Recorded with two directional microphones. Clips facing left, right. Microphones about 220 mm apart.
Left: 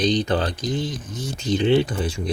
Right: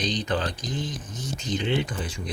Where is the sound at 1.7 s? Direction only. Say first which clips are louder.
Left 10 dB; 30° left (ahead or behind).